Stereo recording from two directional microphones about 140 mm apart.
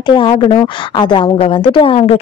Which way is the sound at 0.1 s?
35° left (ahead or behind).